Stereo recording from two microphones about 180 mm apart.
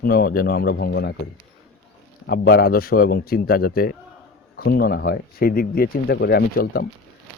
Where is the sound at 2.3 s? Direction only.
60° left (ahead or behind).